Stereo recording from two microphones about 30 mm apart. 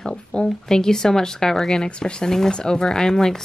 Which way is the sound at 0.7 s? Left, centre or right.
Centre.